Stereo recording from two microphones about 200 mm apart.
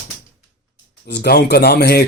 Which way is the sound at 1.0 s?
55° left (ahead or behind).